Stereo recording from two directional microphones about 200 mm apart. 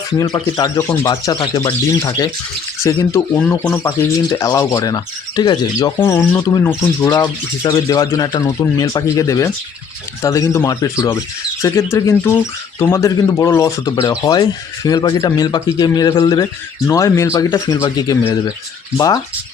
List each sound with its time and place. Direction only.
0.2 s speech: 20° left (ahead or behind)